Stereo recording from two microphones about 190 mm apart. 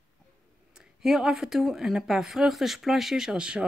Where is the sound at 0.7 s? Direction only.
5° right (ahead or behind).